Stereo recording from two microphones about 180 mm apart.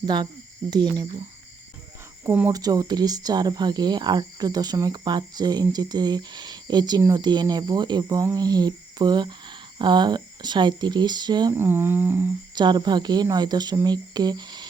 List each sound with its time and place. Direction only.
0.0 s speech: 25° right (ahead or behind)
2.5 s speech: 20° right (ahead or behind)
11.5 s a sound: 10° right (ahead or behind)
12.5 s speech: 25° right (ahead or behind)